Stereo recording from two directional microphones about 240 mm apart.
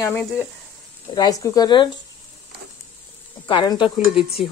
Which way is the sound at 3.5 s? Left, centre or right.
Centre.